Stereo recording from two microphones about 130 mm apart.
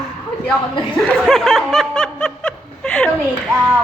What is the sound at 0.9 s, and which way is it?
Snicker, 5° left (ahead or behind).